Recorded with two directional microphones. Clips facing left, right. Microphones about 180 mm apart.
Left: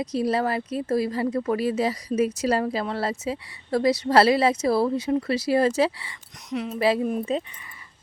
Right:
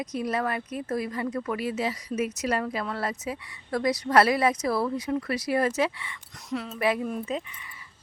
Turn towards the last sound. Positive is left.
turn(degrees=35)  # may be behind; listen again after turning